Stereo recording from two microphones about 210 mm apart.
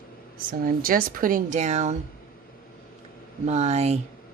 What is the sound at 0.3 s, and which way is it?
Speech, 45° right (ahead or behind).